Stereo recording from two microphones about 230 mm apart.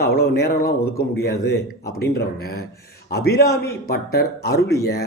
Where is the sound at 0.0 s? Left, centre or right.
Left.